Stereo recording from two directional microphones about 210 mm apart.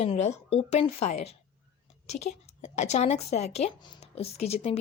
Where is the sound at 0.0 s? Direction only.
30° left (ahead or behind).